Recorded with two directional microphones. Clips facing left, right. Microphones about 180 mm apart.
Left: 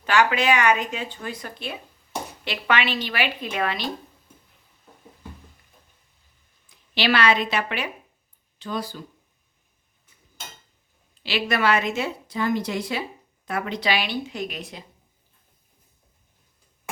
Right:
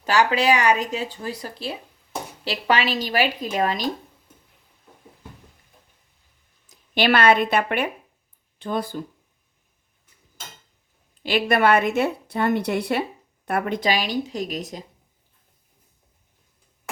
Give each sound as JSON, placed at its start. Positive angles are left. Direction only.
{"t": 0.0, "sound": "speech", "side_deg": -35}
{"t": 6.7, "sound": "a woman's voice", "side_deg": -50}
{"t": 11.2, "sound": "a woman's voice", "side_deg": -50}